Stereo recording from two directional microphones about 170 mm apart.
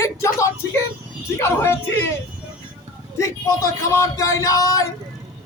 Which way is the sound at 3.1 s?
15° left (ahead or behind).